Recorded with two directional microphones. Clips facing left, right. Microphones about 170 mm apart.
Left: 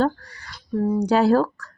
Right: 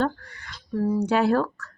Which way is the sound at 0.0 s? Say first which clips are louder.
Left 4 dB; 35° left (ahead or behind).